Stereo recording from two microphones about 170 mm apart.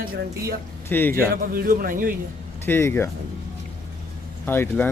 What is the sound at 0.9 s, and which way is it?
Speech, 10° left (ahead or behind).